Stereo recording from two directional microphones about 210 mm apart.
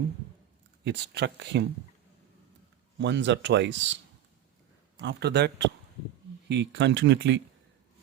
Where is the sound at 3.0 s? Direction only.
55° right (ahead or behind).